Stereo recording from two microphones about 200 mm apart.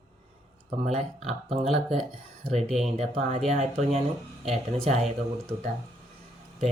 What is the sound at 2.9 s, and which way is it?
Speech, 30° right (ahead or behind).